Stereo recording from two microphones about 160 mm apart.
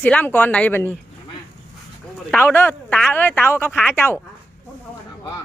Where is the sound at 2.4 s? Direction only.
15° left (ahead or behind).